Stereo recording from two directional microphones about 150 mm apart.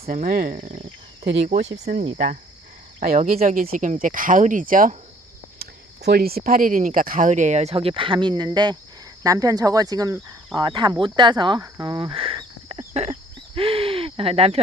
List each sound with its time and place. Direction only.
0.1 s speech: 65° right (ahead or behind)
1.8 s speech: 50° right (ahead or behind)
5.5 s speech: 90° right; by 13.1 s 40° right (ahead or behind)
13.6 s a sound: 40° right (ahead or behind)